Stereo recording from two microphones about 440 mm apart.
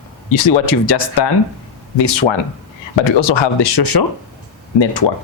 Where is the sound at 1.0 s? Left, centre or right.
Left.